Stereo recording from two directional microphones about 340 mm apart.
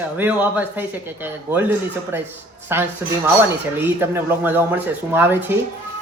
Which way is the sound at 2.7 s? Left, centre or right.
Centre.